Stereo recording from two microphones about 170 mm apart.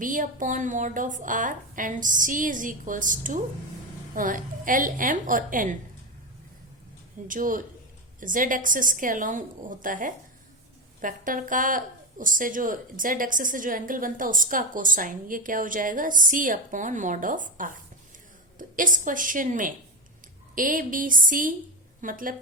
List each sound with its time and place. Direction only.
0.0 s a woman's voice: 50° right (ahead or behind)
7.3 s a woman's voice: 50° right (ahead or behind)
18.8 s a woman's voice: 50° right (ahead or behind)